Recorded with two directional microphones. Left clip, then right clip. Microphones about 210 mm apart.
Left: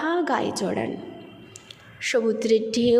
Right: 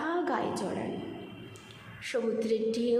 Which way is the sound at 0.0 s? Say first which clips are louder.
Left 7 dB; 30° left (ahead or behind).